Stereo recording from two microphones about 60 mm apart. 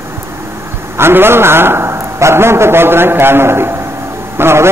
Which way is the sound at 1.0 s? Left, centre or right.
Right.